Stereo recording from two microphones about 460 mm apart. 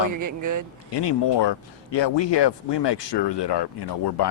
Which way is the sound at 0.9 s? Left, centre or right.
Left.